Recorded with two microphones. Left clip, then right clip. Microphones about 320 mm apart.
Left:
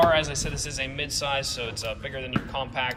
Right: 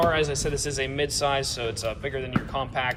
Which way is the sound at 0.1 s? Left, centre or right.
Centre.